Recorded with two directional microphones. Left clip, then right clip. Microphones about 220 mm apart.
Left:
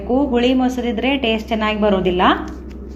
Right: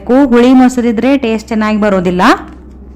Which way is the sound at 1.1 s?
25° right (ahead or behind).